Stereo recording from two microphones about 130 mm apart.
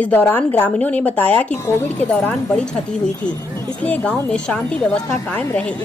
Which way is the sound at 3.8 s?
10° left (ahead or behind).